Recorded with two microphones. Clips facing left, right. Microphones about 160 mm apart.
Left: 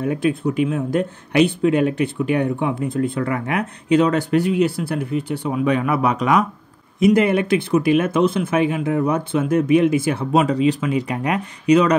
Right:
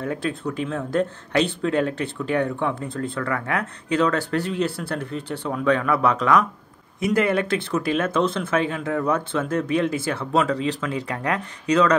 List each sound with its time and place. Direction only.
0.0 s speech: 15° left (ahead or behind)